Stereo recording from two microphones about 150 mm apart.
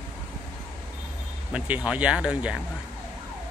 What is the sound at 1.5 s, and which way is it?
Speech, 10° right (ahead or behind).